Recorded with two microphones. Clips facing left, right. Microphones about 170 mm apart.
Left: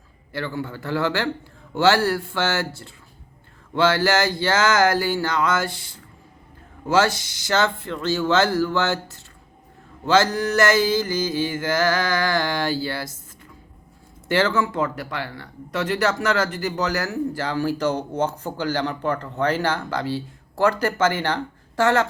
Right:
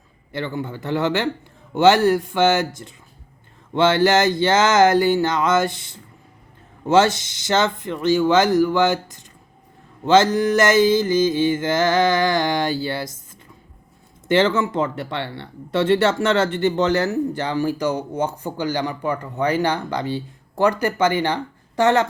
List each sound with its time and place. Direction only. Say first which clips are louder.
0.3 s speech: right 2 dB; 20° right (ahead or behind)
14.3 s speech: right 3 dB; 20° right (ahead or behind)